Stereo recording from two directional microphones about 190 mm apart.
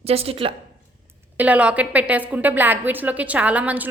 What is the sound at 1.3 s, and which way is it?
A woman's voice, 10° right (ahead or behind).